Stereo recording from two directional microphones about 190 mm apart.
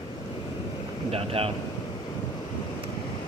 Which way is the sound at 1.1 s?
30° right (ahead or behind).